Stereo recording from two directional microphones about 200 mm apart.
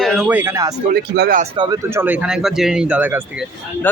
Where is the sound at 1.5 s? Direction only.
20° right (ahead or behind).